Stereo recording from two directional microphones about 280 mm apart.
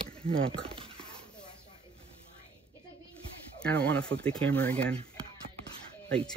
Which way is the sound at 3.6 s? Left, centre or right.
Centre.